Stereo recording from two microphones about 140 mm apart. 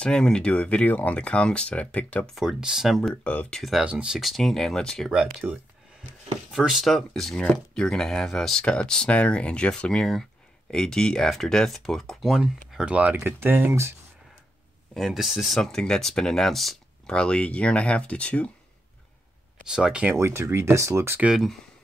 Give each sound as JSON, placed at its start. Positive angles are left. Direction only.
{"t": 0.0, "sound": "speech", "side_deg": 5}
{"t": 2.3, "sound": "speech", "side_deg": -5}
{"t": 3.0, "sound": "speech", "side_deg": 10}
{"t": 15.0, "sound": "speech", "side_deg": 0}
{"t": 19.6, "sound": "speech", "side_deg": -5}
{"t": 20.2, "sound": "speech", "side_deg": -20}
{"t": 21.3, "sound": "speech", "side_deg": 0}